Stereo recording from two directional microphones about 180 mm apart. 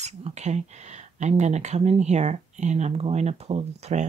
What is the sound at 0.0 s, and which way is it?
Speech, 40° right (ahead or behind).